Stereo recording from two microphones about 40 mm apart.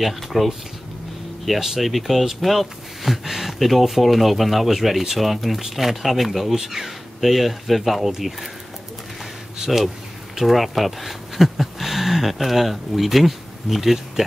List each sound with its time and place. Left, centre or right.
0.0 s speech: centre
9.6 s speech: centre
10.3 s speech: centre